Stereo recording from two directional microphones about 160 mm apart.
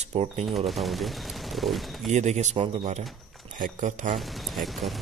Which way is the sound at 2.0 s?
45° right (ahead or behind).